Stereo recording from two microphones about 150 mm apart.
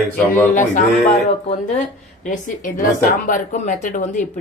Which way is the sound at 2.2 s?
60° left (ahead or behind).